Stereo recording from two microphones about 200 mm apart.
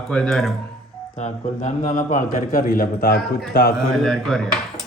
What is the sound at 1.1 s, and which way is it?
A man's voice, 35° left (ahead or behind).